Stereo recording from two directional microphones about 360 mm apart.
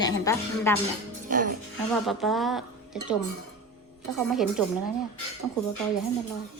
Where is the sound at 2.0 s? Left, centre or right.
Centre.